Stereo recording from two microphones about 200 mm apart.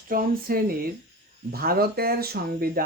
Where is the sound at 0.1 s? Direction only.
45° right (ahead or behind).